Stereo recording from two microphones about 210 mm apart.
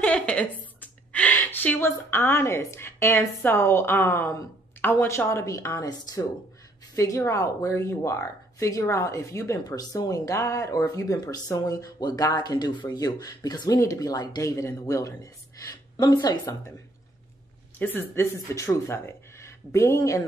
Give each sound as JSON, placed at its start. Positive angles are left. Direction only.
{"t": 0.0, "sound": "a woman's voice", "side_deg": 5}
{"t": 17.7, "sound": "speech", "side_deg": 10}